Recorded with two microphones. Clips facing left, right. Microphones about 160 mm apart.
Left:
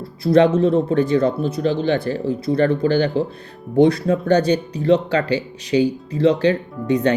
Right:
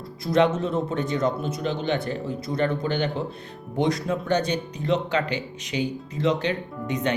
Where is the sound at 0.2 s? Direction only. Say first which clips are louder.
Left 7 dB; 35° left (ahead or behind).